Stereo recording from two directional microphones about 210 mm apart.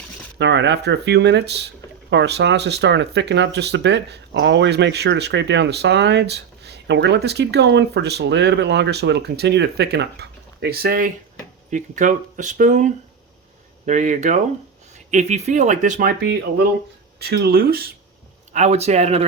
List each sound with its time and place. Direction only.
0.3 s speech: 55° right (ahead or behind)
18.5 s speech: 30° right (ahead or behind)